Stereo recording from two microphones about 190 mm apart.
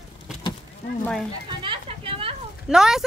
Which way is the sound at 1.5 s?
25° right (ahead or behind).